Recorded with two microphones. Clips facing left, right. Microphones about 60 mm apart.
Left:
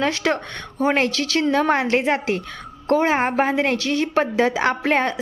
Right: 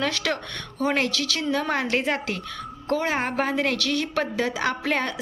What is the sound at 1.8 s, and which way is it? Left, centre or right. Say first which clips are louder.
A woman's voice: left 5 dB; left.